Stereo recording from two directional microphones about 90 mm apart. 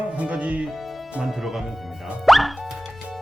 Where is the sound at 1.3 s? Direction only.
Centre (ahead or behind).